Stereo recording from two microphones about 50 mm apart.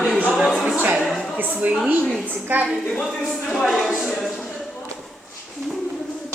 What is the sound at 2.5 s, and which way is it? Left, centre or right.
Speech, right.